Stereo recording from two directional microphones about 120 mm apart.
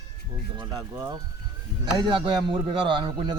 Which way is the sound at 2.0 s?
40° right (ahead or behind).